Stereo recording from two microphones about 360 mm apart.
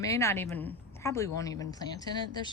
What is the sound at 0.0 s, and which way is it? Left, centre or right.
A woman's voice, centre.